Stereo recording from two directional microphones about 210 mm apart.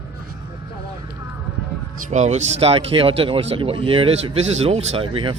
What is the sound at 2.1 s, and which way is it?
A man's voice, 35° right (ahead or behind).